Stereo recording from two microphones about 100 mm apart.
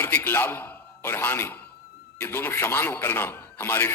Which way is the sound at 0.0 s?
20° left (ahead or behind).